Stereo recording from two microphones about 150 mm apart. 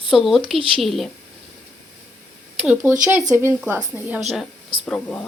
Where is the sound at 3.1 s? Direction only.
15° right (ahead or behind).